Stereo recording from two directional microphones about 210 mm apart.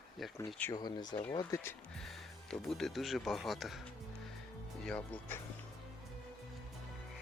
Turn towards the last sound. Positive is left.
turn(degrees=5)  # may be behind; listen again after turning